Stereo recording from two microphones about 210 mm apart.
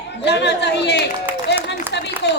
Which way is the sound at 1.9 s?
55° left (ahead or behind).